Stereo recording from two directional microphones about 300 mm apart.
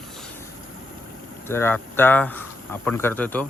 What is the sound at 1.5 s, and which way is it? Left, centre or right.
Speech, centre.